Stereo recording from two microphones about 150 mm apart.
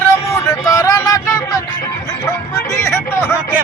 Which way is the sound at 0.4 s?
25° left (ahead or behind).